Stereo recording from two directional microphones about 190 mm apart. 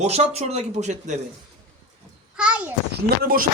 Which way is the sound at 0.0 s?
35° right (ahead or behind).